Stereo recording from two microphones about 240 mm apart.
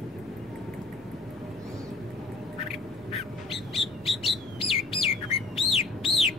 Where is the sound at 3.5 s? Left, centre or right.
Centre.